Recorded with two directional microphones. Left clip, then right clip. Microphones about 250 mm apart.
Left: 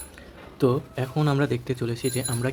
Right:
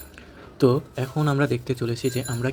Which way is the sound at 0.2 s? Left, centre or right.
Centre.